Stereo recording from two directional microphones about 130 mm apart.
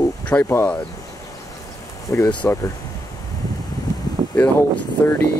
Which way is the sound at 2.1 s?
25° left (ahead or behind).